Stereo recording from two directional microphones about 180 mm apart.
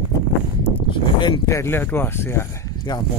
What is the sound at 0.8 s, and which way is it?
Speech, 25° left (ahead or behind).